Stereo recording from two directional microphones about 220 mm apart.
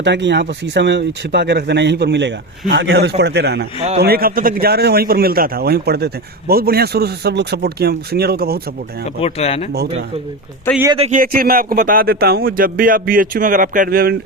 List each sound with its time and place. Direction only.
0.0 s speech: 50° right (ahead or behind)
9.0 s speech: 25° left (ahead or behind)
10.9 s speech: 30° right (ahead or behind)